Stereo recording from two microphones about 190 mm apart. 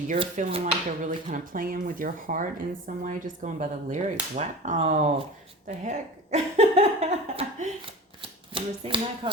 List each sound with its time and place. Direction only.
0.3 s speech: 40° right (ahead or behind)